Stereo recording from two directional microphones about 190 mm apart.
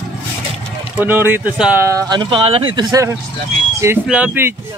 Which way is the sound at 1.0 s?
10° right (ahead or behind).